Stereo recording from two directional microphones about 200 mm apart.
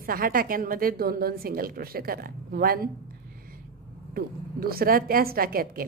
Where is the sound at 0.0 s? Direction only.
45° right (ahead or behind).